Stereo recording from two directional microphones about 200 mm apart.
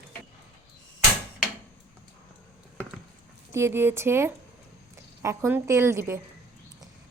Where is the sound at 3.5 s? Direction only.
10° right (ahead or behind).